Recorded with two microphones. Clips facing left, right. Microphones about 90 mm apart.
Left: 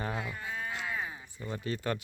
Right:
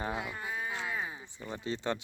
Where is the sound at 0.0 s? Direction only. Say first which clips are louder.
Even; 15° right (ahead or behind).